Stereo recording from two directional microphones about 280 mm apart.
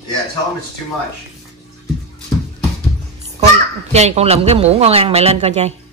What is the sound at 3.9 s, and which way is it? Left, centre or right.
Speech, right.